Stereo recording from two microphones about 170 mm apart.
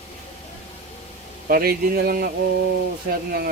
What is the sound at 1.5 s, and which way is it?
Speech, 60° right (ahead or behind).